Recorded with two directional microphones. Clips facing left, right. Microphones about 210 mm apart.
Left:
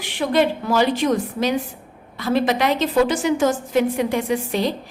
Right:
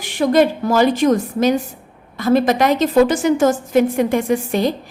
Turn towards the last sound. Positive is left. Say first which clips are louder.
# right 4 dB
turn(degrees=-45)  # may be behind; listen again after turning